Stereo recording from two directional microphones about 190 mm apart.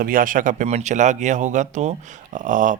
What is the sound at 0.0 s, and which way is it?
Speech, 50° right (ahead or behind).